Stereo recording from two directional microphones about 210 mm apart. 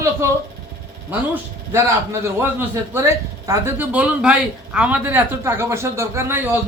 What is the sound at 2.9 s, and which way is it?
Speech, 15° right (ahead or behind).